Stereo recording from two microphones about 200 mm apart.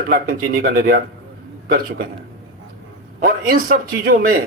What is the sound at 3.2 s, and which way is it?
A man's voice, 45° right (ahead or behind).